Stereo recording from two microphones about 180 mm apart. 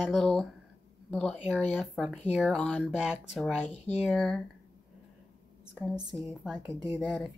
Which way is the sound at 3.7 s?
35° left (ahead or behind).